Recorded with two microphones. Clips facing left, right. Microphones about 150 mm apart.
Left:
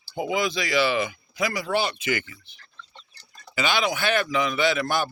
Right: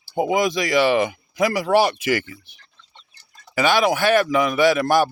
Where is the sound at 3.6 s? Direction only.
50° right (ahead or behind).